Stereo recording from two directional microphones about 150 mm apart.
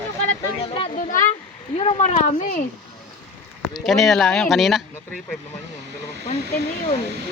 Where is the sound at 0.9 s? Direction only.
60° left (ahead or behind).